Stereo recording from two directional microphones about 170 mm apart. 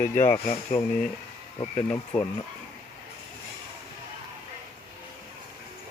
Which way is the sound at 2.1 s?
10° left (ahead or behind).